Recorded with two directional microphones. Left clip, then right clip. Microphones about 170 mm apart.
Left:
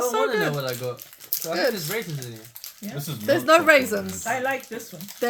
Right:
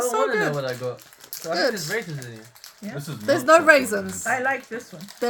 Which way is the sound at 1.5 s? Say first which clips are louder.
Right 1 dB; 40° right (ahead or behind).